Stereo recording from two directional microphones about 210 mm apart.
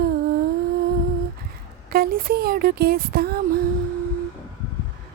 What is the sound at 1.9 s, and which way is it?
Speech, 45° right (ahead or behind).